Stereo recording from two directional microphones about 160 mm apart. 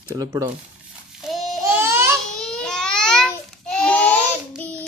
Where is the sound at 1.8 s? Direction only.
15° right (ahead or behind).